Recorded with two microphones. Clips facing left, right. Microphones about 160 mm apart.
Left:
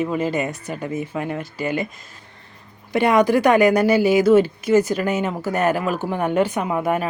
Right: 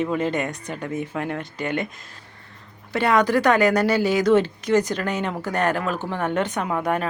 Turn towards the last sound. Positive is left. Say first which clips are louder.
# left 2 dB
turn(degrees=5)  # may be behind; listen again after turning